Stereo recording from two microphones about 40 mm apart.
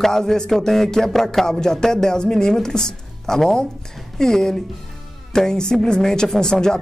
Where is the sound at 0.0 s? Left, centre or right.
Centre.